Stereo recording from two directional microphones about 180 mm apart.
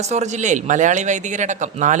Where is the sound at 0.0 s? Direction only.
40° right (ahead or behind).